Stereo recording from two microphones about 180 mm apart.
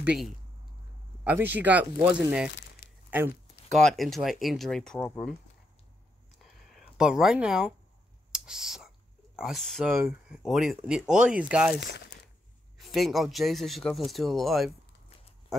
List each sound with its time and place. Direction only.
0.0 s speech: 5° right (ahead or behind)
2.8 s a sound: 60° left (ahead or behind)
3.7 s speech: centre (ahead or behind)
6.7 s speech: 5° right (ahead or behind)
8.3 s whispering: 5° right (ahead or behind)
9.4 s speech: centre (ahead or behind)